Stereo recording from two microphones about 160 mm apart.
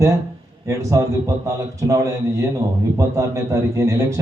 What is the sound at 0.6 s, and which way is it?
A man's voice, 20° right (ahead or behind).